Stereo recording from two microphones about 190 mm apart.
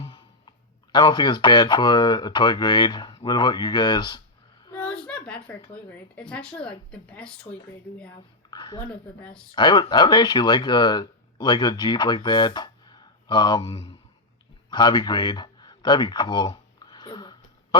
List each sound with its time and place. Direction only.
0.0 s a sound: 20° left (ahead or behind)
0.9 s speech: 25° left (ahead or behind)
5.0 s speech: 5° left (ahead or behind)
8.4 s a woman's voice: 20° left (ahead or behind)
8.9 s speech: 5° left (ahead or behind)
9.5 s speech: 25° left (ahead or behind)
14.7 s a sound: 25° left (ahead or behind)